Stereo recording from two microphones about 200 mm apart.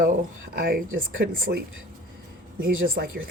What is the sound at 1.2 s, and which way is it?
Speech, 50° right (ahead or behind).